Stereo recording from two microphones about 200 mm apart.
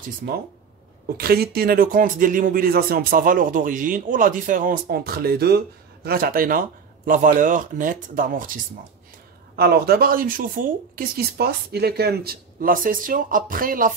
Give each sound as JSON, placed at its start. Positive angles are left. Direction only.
{"t": 1.0, "sound": "speech", "side_deg": -50}
{"t": 9.6, "sound": "speech", "side_deg": -50}